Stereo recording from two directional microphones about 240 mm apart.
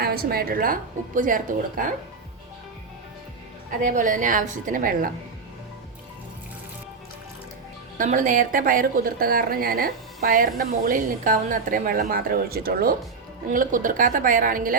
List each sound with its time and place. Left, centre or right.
0.0 s a woman's voice: right
3.8 s a woman's voice: right
7.9 s a woman's voice: right